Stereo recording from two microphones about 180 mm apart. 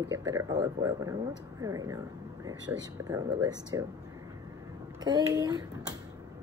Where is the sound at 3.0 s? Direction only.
20° right (ahead or behind).